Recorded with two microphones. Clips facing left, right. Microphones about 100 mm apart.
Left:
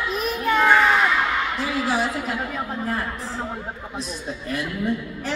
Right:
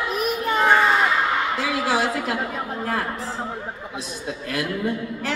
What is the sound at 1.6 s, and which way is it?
Speech, 90° right.